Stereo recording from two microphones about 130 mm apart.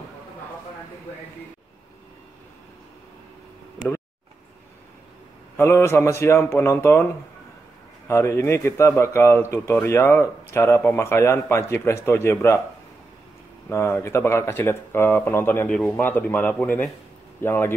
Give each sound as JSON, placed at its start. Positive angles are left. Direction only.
{"t": 5.6, "sound": "speech", "side_deg": 20}
{"t": 8.1, "sound": "speech", "side_deg": 20}
{"t": 13.7, "sound": "speech", "side_deg": 20}